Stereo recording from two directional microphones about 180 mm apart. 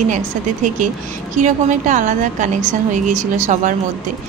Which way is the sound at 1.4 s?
45° right (ahead or behind).